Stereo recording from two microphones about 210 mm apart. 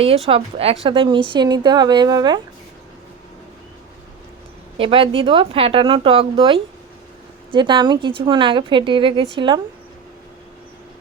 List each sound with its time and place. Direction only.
0.3 s a woman's voice: 25° right (ahead or behind)
4.8 s a woman's voice: 25° right (ahead or behind)